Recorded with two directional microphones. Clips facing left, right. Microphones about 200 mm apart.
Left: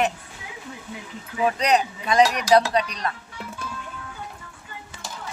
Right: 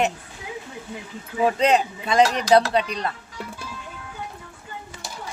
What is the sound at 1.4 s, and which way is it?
Speech, 25° right (ahead or behind).